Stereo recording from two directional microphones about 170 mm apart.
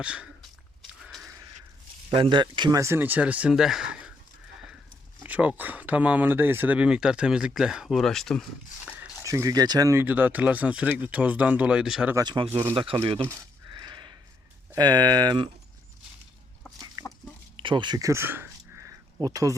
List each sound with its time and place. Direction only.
0.0 s speech: 5° right (ahead or behind)
1.0 s a sound: centre (ahead or behind)
2.0 s speech: 30° right (ahead or behind); by 4.1 s 5° right (ahead or behind)
5.2 s speech: 10° right (ahead or behind)
9.2 s speech: 20° right (ahead or behind); by 12.1 s 5° right (ahead or behind)
12.1 s speech: 25° right (ahead or behind)
13.7 s a sound: 25° right (ahead or behind)
14.7 s speech: 25° right (ahead or behind)
17.0 s chicken: 20° right (ahead or behind)
17.6 s a sound: 30° right (ahead or behind)